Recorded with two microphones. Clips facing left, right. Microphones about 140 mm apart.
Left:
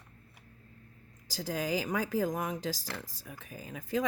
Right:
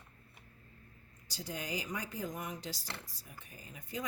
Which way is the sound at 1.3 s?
90° left.